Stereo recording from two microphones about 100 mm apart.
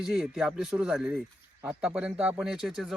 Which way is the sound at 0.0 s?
5° right (ahead or behind).